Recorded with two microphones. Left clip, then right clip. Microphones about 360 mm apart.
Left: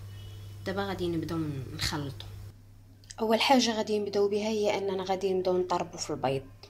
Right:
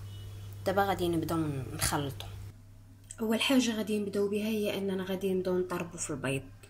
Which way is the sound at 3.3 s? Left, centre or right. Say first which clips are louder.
Left 5 dB; centre.